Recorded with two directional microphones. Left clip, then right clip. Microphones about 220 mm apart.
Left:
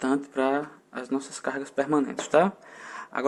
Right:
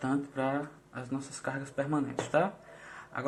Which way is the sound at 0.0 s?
45° left (ahead or behind).